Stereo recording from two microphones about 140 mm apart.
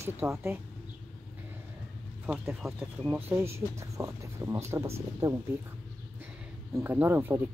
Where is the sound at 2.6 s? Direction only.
Centre (ahead or behind); by 5.3 s 20° right (ahead or behind).